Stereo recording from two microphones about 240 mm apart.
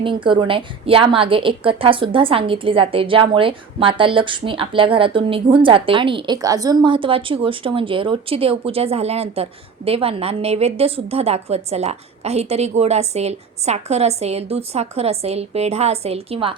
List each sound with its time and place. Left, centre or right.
0.0 s a woman's voice: right